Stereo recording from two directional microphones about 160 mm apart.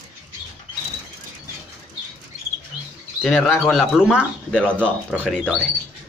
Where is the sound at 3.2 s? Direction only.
5° left (ahead or behind).